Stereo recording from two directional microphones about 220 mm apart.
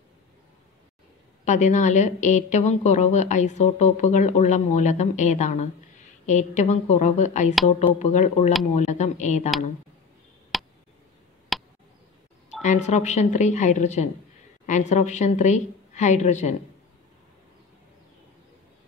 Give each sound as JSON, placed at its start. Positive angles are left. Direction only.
{"t": 1.4, "sound": "a woman's voice", "side_deg": 35}
{"t": 10.5, "sound": "a sound", "side_deg": 0}
{"t": 12.6, "sound": "a woman's voice", "side_deg": 30}